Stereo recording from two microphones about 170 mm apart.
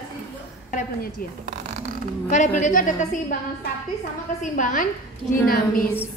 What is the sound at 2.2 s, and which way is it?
A woman's voice, 45° left (ahead or behind).